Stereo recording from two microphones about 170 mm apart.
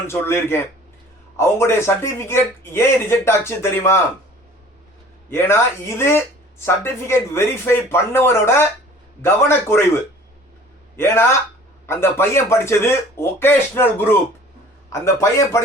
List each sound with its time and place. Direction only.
0.1 s speech: 15° left (ahead or behind)
5.3 s speech: 15° left (ahead or behind)